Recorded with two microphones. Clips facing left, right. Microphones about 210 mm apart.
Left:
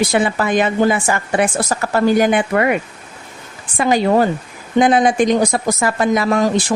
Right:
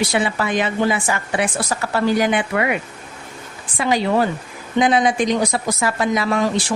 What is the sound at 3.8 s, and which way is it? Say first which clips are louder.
Speech: left 4 dB; 50° left (ahead or behind).